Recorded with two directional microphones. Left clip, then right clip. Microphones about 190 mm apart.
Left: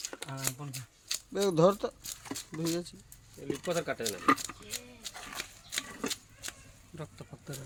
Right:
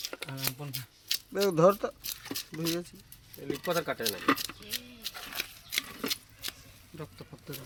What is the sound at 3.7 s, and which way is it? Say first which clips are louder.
Speech: right 2 dB; 10° right (ahead or behind).